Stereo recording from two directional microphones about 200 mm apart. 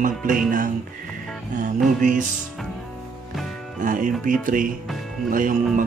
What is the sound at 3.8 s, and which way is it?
Music, 40° right (ahead or behind).